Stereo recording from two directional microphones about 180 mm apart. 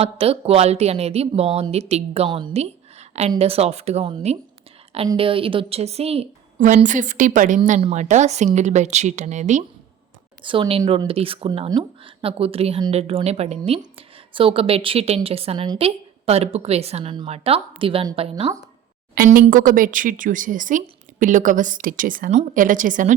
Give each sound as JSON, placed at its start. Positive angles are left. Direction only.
{"t": 0.0, "sound": "a woman's voice", "side_deg": -35}
{"t": 10.4, "sound": "a woman's voice", "side_deg": -30}
{"t": 19.1, "sound": "a woman's voice", "side_deg": -50}